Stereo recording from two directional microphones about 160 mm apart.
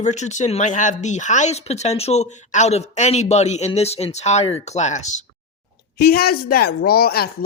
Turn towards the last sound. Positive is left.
turn(degrees=75)  # may be behind; listen again after turning